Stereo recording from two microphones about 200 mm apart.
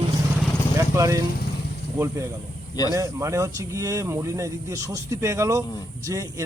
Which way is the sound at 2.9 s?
15° right (ahead or behind).